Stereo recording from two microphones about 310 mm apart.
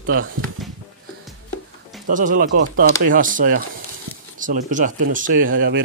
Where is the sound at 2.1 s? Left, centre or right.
Right.